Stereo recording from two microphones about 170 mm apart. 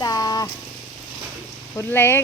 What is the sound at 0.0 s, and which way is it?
Vehicle, 20° left (ahead or behind).